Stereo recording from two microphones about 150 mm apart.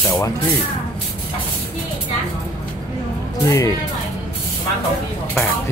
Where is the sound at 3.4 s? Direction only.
20° left (ahead or behind).